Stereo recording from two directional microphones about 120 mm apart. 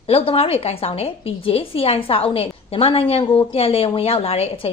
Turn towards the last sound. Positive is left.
turn(degrees=55)  # may be behind; listen again after turning